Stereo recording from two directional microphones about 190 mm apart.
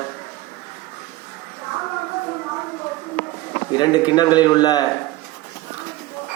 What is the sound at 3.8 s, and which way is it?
A man's voice, 20° left (ahead or behind).